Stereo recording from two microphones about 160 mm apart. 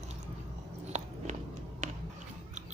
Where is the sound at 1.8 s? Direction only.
50° right (ahead or behind).